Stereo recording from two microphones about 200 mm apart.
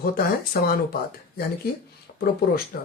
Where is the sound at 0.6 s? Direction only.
50° left (ahead or behind).